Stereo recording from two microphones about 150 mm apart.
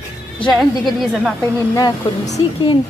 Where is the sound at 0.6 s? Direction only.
Centre (ahead or behind).